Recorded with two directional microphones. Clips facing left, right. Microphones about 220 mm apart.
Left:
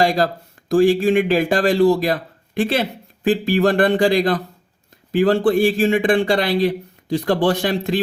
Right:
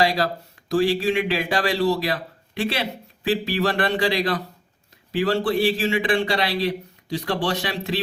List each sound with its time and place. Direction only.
0.0 s a man's voice: 45° left (ahead or behind)